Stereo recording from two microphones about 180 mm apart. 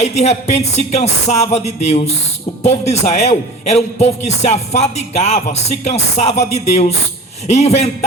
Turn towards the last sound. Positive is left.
turn(degrees=40)  # may be behind; listen again after turning